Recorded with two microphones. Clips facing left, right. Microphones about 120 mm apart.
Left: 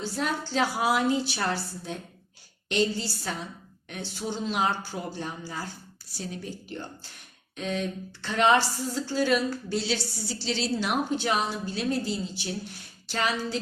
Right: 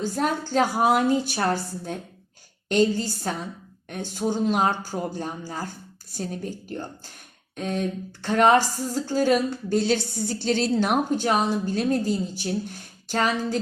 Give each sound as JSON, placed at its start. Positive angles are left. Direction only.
{"t": 0.0, "sound": "a woman's voice", "side_deg": -50}